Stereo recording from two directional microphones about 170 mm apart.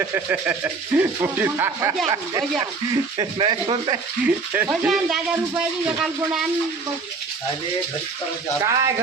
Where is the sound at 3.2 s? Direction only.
30° right (ahead or behind).